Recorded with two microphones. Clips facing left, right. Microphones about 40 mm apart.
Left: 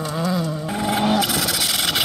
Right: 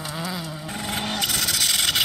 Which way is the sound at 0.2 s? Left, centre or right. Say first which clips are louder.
Left 8 dB; centre.